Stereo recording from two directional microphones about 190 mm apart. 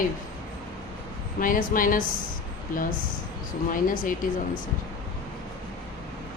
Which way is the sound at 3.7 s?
45° left (ahead or behind).